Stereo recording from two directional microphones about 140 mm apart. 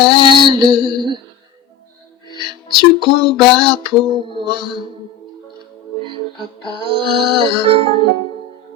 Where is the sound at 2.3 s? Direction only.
35° right (ahead or behind).